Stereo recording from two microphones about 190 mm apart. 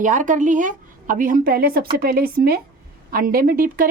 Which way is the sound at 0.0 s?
40° right (ahead or behind).